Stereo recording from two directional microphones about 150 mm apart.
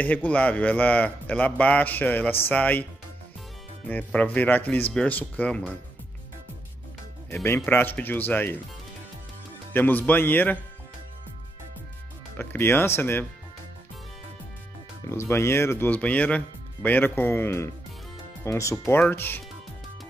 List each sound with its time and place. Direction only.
0.0 s a man's voice: 10° left (ahead or behind)
7.4 s a man's voice: 15° left (ahead or behind)
9.8 s a man's voice: 10° left (ahead or behind)
12.4 s a man's voice: 15° left (ahead or behind)
15.0 s a man's voice: 15° left (ahead or behind)